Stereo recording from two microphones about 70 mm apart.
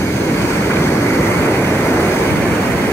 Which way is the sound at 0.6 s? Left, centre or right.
Left.